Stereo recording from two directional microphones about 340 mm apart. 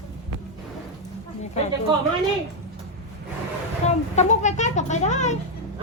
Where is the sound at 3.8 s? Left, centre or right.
Centre.